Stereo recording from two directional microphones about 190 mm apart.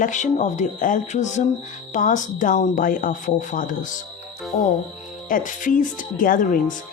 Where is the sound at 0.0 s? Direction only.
40° left (ahead or behind).